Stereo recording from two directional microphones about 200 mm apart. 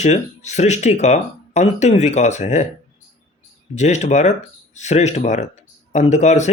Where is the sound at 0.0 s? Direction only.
35° left (ahead or behind).